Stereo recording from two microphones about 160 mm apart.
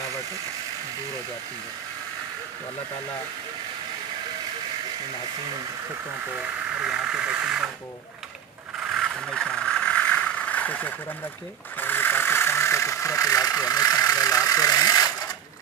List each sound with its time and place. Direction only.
6.8 s speech: 5° right (ahead or behind)
8.8 s vehicle: centre (ahead or behind); by 15.1 s 25° left (ahead or behind)